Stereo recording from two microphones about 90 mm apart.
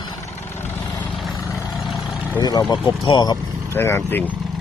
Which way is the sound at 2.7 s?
60° left (ahead or behind).